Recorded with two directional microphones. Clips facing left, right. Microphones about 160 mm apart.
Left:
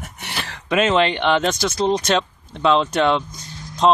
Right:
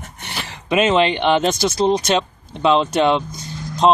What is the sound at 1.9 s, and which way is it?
Speech, 10° right (ahead or behind).